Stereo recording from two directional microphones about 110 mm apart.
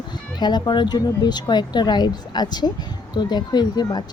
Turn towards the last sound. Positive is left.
turn(degrees=40)  # may be behind; listen again after turning